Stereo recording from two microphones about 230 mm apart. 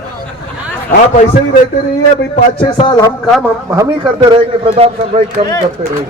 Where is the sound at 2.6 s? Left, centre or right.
Centre.